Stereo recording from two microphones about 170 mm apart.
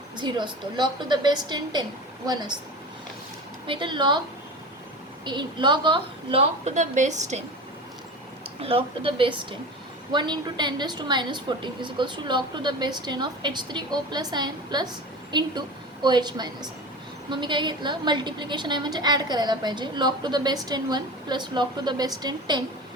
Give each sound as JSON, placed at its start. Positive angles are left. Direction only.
{"t": 0.2, "sound": "a woman's voice", "side_deg": -25}
{"t": 3.7, "sound": "a woman's voice", "side_deg": -30}
{"t": 5.2, "sound": "a woman's voice", "side_deg": -25}
{"t": 8.6, "sound": "a woman's voice", "side_deg": -35}